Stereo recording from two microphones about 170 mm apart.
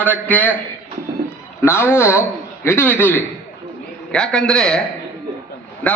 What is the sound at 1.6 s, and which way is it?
A man's voice, 15° left (ahead or behind).